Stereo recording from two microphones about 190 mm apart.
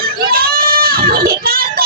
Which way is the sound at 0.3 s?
50° right (ahead or behind).